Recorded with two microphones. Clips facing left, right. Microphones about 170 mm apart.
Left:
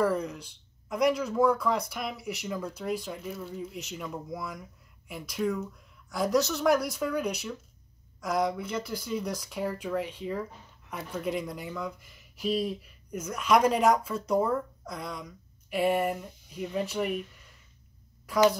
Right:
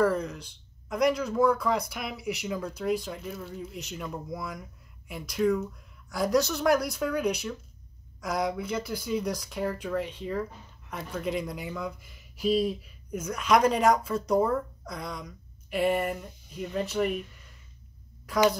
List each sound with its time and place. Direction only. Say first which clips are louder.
0.0 s speech: right 2 dB; 10° left (ahead or behind); by 2.3 s 10° right (ahead or behind)
2.6 s speech: right 6 dB; 5° left (ahead or behind)
11.2 s speech: right 1 dB; 5° left (ahead or behind)